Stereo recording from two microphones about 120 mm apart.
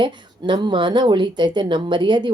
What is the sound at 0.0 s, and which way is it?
A woman's voice, 40° right (ahead or behind).